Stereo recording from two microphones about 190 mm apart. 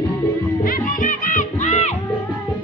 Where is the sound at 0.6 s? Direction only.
45° left (ahead or behind).